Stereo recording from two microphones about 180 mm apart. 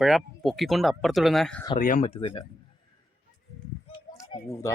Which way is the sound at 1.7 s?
50° left (ahead or behind).